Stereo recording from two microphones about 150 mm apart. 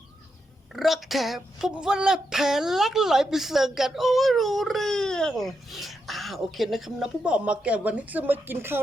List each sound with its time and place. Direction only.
0.7 s speech: centre (ahead or behind)